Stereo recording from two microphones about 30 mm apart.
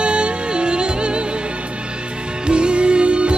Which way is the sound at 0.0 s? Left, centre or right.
Right.